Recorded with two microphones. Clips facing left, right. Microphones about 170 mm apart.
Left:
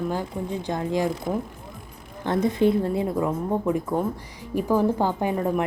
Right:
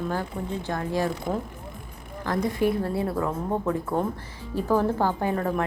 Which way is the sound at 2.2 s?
25° left (ahead or behind).